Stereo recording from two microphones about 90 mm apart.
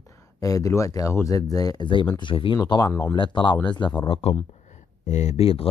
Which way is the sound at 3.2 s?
65° left (ahead or behind).